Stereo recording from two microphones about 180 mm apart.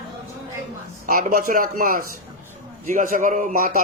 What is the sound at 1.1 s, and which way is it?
A man's voice, 50° right (ahead or behind).